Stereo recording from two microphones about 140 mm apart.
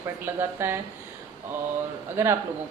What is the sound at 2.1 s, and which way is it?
Speech, 20° right (ahead or behind).